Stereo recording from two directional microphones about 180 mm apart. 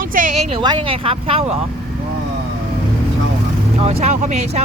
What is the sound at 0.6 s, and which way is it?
Speech, 25° right (ahead or behind).